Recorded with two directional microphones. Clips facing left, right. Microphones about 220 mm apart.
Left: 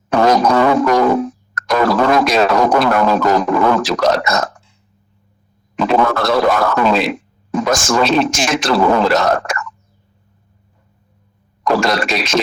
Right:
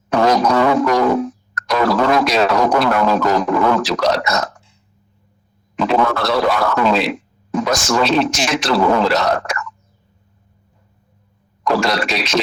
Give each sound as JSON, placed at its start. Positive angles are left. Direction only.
{"t": 0.1, "sound": "didgeridoo", "side_deg": 50}
{"t": 5.7, "sound": "a man's voice", "side_deg": 50}
{"t": 11.6, "sound": "a man's voice", "side_deg": 50}